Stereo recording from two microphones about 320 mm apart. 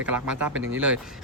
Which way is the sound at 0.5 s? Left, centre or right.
Right.